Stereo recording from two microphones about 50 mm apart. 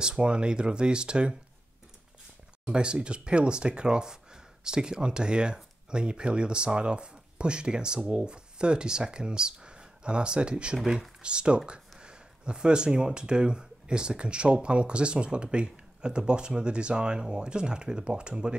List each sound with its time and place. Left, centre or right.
0.0 s speech: centre
2.6 s speech: centre